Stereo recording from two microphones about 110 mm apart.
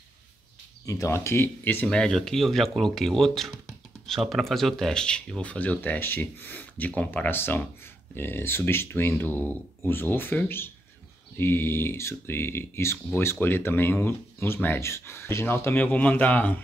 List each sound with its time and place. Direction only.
0.8 s speech: 30° left (ahead or behind); by 16.5 s 15° left (ahead or behind)